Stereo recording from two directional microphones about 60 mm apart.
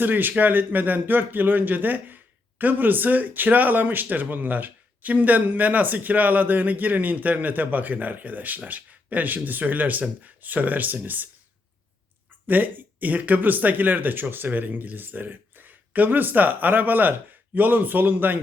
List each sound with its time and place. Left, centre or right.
0.0 s speech: right
12.5 s speech: right